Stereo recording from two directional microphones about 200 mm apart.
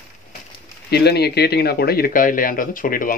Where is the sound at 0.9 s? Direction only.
55° left (ahead or behind).